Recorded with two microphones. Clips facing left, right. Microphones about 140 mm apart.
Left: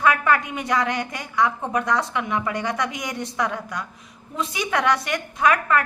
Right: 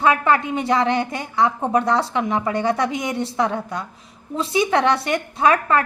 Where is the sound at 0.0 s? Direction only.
25° right (ahead or behind).